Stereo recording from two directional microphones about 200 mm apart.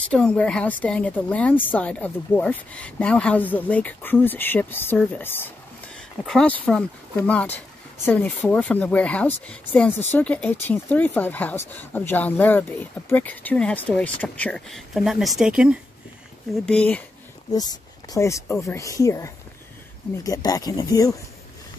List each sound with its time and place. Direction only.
0.1 s a woman's voice: 5° left (ahead or behind)
17.5 s a woman's voice: 20° left (ahead or behind)